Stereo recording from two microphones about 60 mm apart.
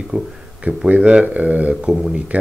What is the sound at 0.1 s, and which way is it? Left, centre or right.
Speech, right.